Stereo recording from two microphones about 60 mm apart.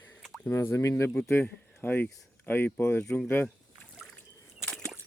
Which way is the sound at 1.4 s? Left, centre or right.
Left.